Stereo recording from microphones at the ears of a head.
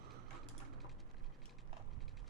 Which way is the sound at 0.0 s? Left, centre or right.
Right.